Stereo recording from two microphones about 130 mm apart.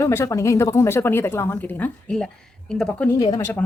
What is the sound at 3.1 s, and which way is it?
Speech, 30° left (ahead or behind).